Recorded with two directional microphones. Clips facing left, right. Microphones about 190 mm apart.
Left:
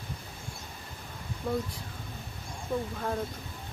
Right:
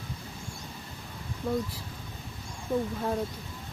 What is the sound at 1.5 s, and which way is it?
Speech, centre (ahead or behind).